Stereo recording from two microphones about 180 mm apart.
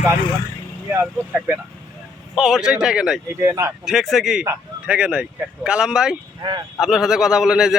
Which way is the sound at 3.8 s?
Centre (ahead or behind).